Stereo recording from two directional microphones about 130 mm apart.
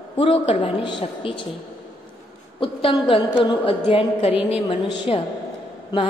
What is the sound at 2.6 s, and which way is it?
A woman's voice, 40° left (ahead or behind).